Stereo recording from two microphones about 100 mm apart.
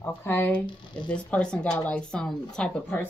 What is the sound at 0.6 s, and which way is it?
Speech, 50° left (ahead or behind).